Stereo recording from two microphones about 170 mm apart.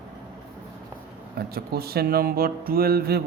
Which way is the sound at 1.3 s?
65° right (ahead or behind).